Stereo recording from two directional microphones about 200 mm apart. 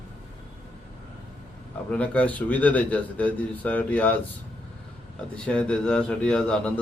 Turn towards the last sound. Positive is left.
turn(degrees=5)  # may be behind; listen again after turning